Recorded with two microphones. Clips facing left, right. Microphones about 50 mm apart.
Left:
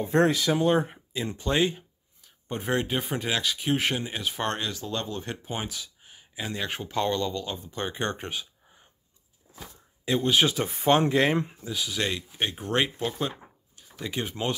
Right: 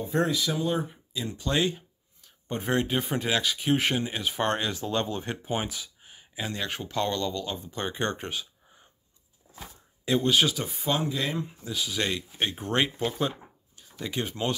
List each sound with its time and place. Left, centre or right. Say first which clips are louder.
0.0 s speech: left 4 dB; left
1.2 s speech: left 2 dB; left
1.5 s speech: left 2 dB; centre
1.8 s speech: left 3 dB; centre
4.7 s speech: right 3 dB; right
5.2 s speech: right 3 dB; centre
10.0 s speech: right 1 dB; centre
10.5 s speech: left 4 dB; left
10.9 s speech: left 7 dB; left
11.6 s speech: even; centre
13.7 s a sound: even; centre